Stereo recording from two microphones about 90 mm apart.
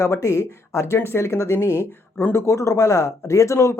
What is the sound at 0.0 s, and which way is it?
Speech, 35° left (ahead or behind).